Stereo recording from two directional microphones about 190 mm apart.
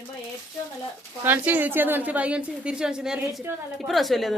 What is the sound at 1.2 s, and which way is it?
A woman's voice, 10° right (ahead or behind).